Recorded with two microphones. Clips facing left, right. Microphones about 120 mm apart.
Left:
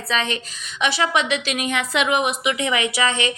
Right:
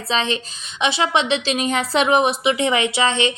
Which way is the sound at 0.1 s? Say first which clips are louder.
Right 2 dB; 25° right (ahead or behind).